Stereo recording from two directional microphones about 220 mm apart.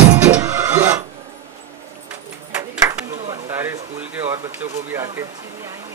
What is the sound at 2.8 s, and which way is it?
Chop, 15° right (ahead or behind).